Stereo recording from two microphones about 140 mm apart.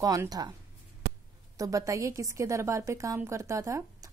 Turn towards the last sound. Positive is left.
turn(degrees=-20)  # may be behind; listen again after turning